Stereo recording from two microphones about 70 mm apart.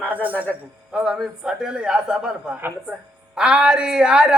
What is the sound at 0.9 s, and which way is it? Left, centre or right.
A woman's voice, centre.